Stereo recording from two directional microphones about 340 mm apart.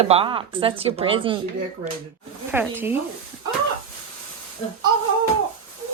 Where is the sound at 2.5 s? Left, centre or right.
Centre.